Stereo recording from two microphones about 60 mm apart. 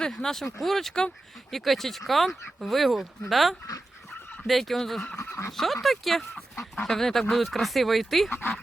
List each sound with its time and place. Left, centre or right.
0.0 s speech: centre
5.2 s speech: left
5.5 s speech: centre